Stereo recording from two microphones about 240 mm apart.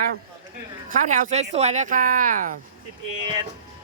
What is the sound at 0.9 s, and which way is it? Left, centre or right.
Speech, right.